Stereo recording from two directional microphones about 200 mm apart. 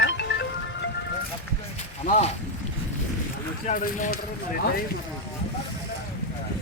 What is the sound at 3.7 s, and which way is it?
Speech, 40° left (ahead or behind).